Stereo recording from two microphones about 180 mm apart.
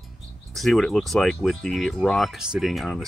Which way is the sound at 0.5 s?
Centre (ahead or behind).